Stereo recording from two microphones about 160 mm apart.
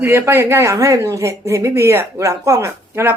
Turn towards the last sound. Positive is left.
turn(degrees=-15)  # may be behind; listen again after turning